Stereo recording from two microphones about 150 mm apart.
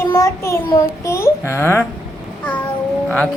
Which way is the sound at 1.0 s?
20° left (ahead or behind).